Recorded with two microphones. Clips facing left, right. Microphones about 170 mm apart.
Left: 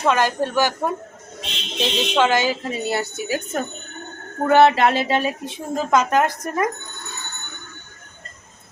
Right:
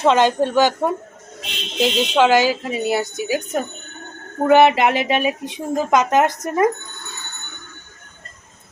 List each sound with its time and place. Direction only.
0.0 s a woman's voice: 20° right (ahead or behind)